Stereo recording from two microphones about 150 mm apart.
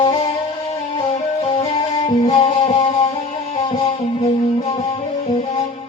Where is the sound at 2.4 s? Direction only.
40° left (ahead or behind).